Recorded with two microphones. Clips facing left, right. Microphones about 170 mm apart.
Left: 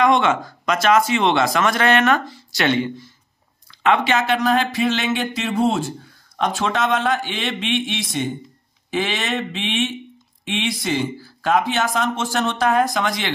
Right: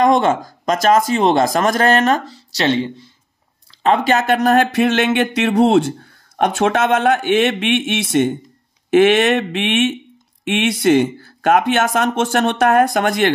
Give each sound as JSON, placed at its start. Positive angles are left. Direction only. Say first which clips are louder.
{"t": 0.0, "sound": "speech", "louder": "right 3 dB", "side_deg": -45}